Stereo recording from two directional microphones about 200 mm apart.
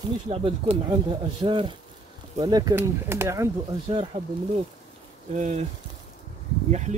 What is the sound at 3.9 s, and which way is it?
Speech, 25° right (ahead or behind).